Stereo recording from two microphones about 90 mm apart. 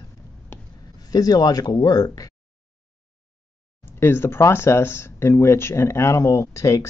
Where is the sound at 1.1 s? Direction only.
45° left (ahead or behind).